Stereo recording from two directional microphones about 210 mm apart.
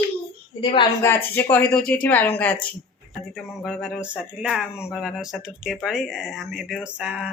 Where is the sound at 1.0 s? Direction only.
10° left (ahead or behind).